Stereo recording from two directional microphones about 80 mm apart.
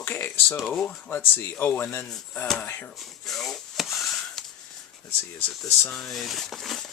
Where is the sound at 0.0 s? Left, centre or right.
Left.